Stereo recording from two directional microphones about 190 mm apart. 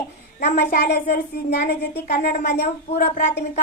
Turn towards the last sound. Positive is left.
turn(degrees=50)  # may be behind; listen again after turning